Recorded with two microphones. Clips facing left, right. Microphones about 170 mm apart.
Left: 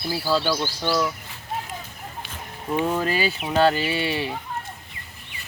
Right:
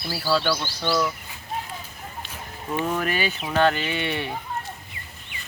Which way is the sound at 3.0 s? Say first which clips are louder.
Left 2 dB; 30° left (ahead or behind).